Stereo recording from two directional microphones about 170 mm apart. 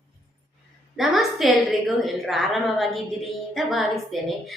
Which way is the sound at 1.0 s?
Centre (ahead or behind).